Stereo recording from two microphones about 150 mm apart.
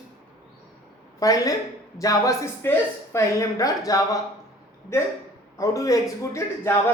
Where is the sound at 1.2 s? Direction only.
25° left (ahead or behind).